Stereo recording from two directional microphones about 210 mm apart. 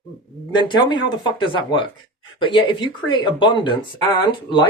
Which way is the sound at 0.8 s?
20° left (ahead or behind).